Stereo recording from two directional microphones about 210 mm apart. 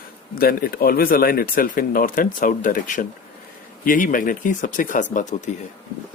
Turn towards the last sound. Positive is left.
turn(degrees=35)  # may be behind; listen again after turning